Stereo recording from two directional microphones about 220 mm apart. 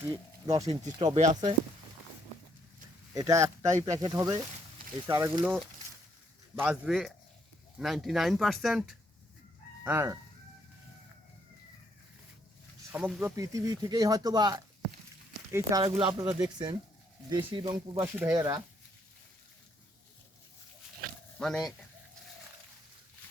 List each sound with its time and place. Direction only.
0.4 s speech: 15° right (ahead or behind)
0.7 s speech: 30° right (ahead or behind)
3.2 s speech: 15° right (ahead or behind)
6.6 s speech: 5° right (ahead or behind)
12.9 s speech: 5° right (ahead or behind)
21.3 s speech: centre (ahead or behind)